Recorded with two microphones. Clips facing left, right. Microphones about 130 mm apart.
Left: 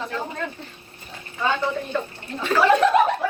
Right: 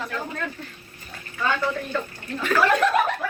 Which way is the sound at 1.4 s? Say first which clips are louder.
Left 1 dB; 20° left (ahead or behind).